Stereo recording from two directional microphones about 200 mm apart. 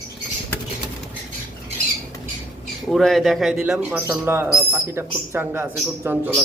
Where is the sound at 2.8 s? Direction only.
Centre (ahead or behind).